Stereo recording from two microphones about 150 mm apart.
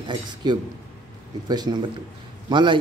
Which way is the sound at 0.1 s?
30° right (ahead or behind).